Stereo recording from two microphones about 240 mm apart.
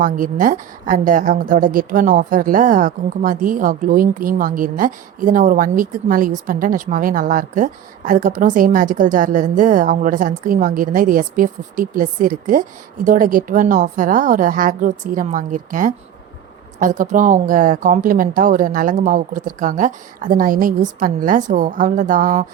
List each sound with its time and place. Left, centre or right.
0.0 s a woman's voice: right